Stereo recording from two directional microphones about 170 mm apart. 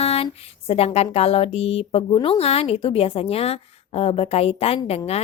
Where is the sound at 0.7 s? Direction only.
35° left (ahead or behind).